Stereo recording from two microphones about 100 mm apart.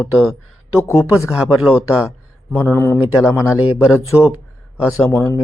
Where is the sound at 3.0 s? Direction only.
10° right (ahead or behind).